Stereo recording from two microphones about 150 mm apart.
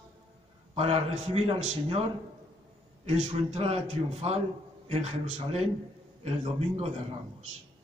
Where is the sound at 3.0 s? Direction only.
40° right (ahead or behind).